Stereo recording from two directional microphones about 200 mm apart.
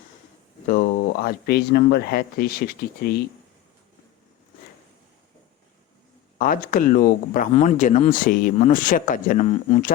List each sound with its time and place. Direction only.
0.7 s speech: 45° left (ahead or behind)
6.4 s speech: 45° left (ahead or behind)